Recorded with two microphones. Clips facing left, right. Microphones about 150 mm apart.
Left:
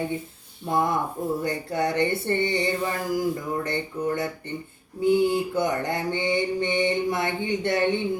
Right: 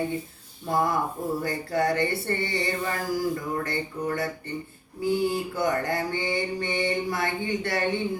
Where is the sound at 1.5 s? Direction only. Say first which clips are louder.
Even; 20° left (ahead or behind).